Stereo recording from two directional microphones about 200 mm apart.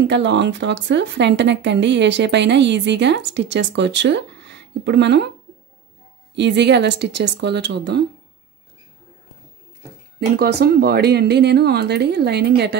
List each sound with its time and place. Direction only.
0.0 s speech: 60° right (ahead or behind)
6.3 s speech: 60° right (ahead or behind)
10.3 s speech: 50° right (ahead or behind)